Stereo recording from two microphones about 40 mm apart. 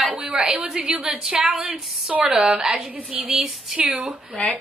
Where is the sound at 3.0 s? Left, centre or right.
Right.